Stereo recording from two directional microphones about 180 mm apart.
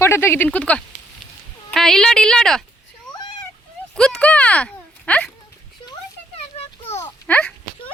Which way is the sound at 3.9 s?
5° left (ahead or behind).